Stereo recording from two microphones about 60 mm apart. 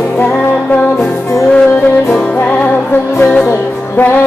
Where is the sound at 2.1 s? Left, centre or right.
Left.